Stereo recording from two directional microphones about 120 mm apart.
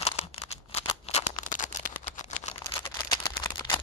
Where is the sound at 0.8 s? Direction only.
60° left (ahead or behind).